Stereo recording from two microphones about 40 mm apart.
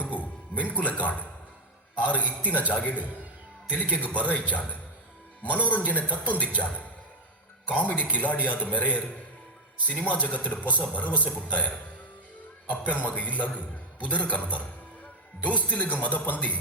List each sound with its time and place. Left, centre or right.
0.0 s music: left
2.0 s a man's voice: left
12.6 s a man's voice: left